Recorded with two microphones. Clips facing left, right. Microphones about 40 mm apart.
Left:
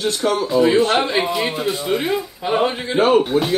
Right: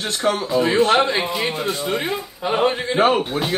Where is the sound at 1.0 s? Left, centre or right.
Centre.